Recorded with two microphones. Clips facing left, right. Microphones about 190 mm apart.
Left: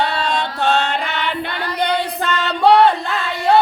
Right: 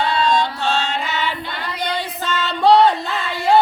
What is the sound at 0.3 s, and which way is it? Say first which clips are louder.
Chant: even; 60° left (ahead or behind).